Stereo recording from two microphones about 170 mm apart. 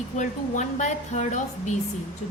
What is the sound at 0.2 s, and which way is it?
A woman's voice, 45° left (ahead or behind).